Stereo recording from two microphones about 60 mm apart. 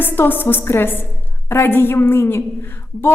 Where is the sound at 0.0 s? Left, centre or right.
Left.